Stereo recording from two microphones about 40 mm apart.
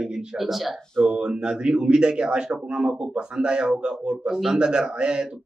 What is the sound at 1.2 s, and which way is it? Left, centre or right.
A man's voice, right.